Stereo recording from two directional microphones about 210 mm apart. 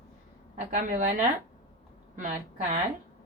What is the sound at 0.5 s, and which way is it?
Speech, 35° right (ahead or behind).